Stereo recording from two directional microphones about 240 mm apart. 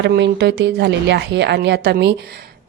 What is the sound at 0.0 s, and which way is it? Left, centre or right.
A woman's voice, right.